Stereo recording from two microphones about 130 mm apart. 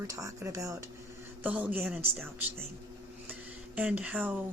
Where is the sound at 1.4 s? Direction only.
10° right (ahead or behind).